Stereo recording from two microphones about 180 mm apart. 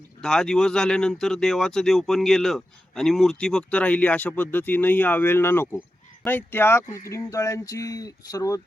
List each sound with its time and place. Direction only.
0.2 s speech: 5° left (ahead or behind)